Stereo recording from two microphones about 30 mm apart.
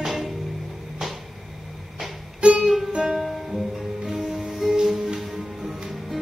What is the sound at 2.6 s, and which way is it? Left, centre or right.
Music, centre.